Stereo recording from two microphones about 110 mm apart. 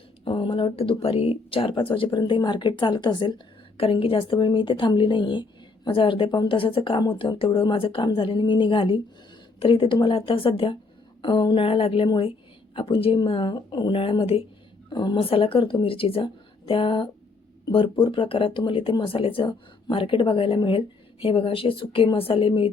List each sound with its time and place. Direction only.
0.3 s a woman's voice: 50° left (ahead or behind)
14.8 s a woman's voice: 45° left (ahead or behind)